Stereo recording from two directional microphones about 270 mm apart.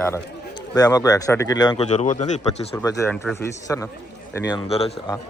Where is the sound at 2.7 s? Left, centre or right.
Centre.